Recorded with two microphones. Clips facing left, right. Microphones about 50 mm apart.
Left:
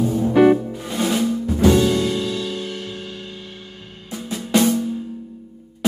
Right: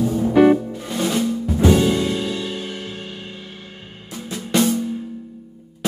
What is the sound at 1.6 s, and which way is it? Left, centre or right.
Music, centre.